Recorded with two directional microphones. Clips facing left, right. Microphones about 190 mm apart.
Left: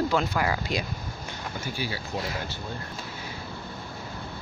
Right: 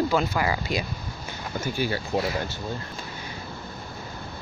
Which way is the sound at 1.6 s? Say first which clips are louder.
Right 7 dB; 50° right (ahead or behind).